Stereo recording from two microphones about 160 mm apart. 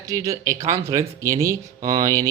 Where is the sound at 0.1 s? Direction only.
20° right (ahead or behind).